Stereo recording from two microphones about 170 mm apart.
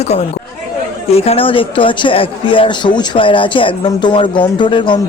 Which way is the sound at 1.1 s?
35° left (ahead or behind).